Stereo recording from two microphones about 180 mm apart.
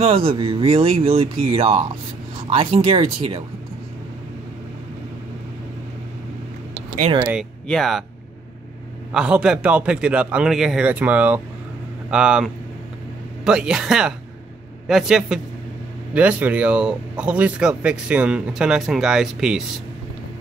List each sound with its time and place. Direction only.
0.0 s speech: 30° right (ahead or behind)
7.6 s speech: centre (ahead or behind)
9.1 s a man's voice: 5° right (ahead or behind)